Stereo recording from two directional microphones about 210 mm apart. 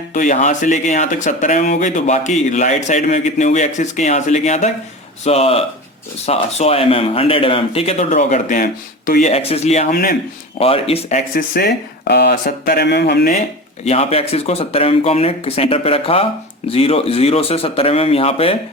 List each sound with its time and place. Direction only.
0.1 s speech: 40° left (ahead or behind)
9.3 s speech: 30° left (ahead or behind)
9.9 s speech: 45° left (ahead or behind)
10.6 s speech: 30° left (ahead or behind)
11.3 s speech: 45° left (ahead or behind)
13.8 s speech: 30° left (ahead or behind)